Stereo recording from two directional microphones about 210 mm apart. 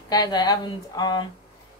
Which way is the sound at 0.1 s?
20° left (ahead or behind).